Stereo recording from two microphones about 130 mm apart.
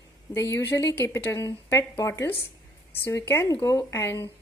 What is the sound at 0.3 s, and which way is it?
A woman's voice, 20° left (ahead or behind).